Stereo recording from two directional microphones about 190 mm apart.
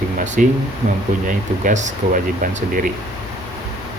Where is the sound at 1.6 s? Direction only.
40° right (ahead or behind).